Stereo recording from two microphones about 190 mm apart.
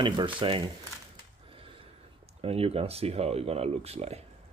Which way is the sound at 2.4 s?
30° right (ahead or behind).